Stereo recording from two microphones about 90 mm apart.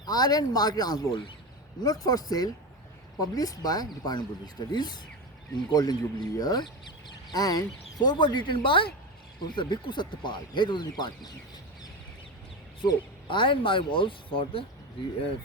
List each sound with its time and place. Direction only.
0.0 s speech: 45° left (ahead or behind)
12.8 s speech: 65° left (ahead or behind)